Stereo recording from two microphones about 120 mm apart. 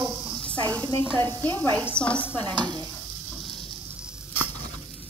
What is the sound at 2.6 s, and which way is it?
Stir, 35° right (ahead or behind).